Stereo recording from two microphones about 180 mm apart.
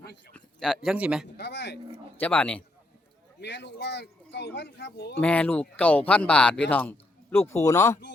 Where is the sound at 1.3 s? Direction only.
70° left (ahead or behind).